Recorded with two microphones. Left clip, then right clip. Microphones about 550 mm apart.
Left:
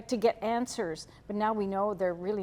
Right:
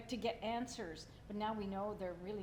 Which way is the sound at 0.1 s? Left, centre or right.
Left.